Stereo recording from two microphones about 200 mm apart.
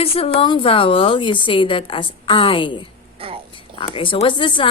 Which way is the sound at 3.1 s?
30° right (ahead or behind).